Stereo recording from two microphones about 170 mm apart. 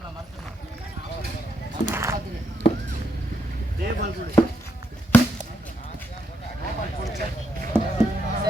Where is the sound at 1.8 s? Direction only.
15° right (ahead or behind).